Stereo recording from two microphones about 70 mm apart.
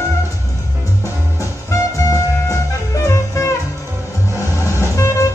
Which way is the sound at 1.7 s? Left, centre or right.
Left.